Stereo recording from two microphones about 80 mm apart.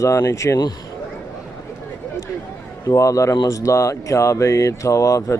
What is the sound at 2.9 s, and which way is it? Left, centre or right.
Speech, left.